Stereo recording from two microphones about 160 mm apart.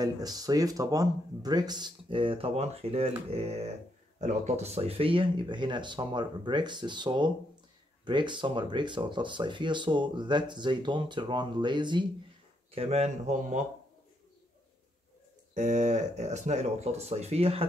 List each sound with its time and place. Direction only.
0.0 s speech: 25° right (ahead or behind)
12.7 s speech: 40° right (ahead or behind)
15.5 s speech: 50° right (ahead or behind)